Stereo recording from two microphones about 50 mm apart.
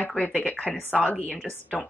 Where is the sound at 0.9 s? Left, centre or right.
Left.